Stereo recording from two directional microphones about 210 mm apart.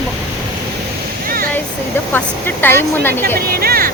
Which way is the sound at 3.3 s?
45° right (ahead or behind).